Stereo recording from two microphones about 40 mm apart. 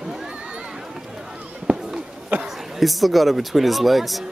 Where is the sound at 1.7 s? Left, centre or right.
Right.